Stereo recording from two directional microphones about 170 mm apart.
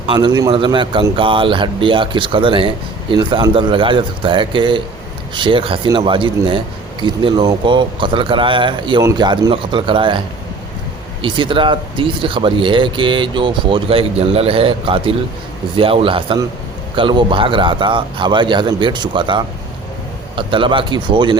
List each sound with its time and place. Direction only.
0.1 s speech: 25° right (ahead or behind)
11.2 s speech: 30° right (ahead or behind)